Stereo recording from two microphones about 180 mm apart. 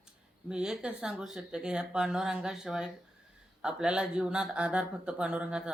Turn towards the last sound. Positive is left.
turn(degrees=-5)  # may be behind; listen again after turning